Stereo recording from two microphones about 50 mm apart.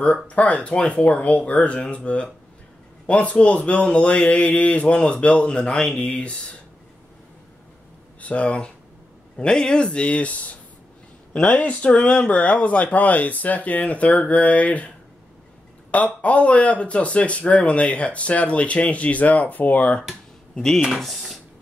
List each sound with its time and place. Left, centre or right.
0.3 s speech: left
8.2 s speech: left
15.9 s speech: left
20.6 s speech: centre